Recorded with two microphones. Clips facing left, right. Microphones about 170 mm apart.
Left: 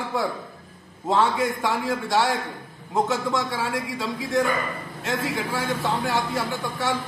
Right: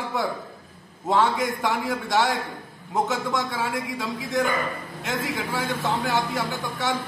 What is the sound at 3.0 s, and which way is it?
Speech, centre (ahead or behind).